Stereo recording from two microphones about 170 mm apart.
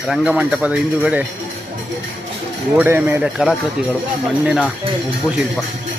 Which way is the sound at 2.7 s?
10° right (ahead or behind).